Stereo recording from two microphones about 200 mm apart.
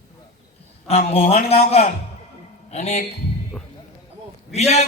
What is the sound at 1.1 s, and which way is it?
A man's voice, 30° left (ahead or behind).